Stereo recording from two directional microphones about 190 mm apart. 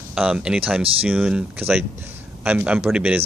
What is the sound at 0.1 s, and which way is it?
A man's voice, 5° right (ahead or behind).